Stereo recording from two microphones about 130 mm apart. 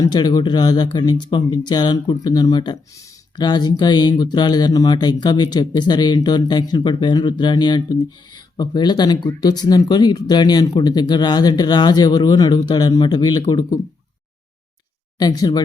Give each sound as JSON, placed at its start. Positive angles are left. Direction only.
{"t": 0.0, "sound": "speech", "side_deg": 30}
{"t": 15.2, "sound": "speech", "side_deg": 30}